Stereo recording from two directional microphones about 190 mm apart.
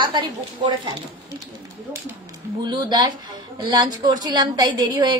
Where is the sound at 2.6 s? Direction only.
25° right (ahead or behind).